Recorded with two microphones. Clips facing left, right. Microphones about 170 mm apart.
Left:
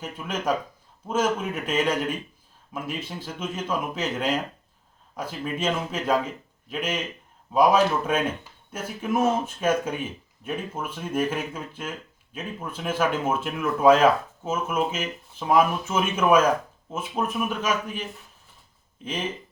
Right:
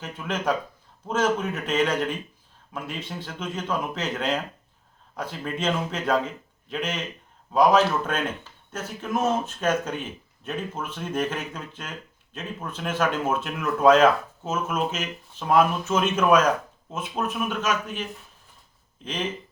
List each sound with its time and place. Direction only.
0.0 s speech: 5° left (ahead or behind)